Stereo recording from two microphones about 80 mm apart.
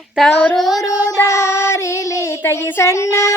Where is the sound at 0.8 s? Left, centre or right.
Left.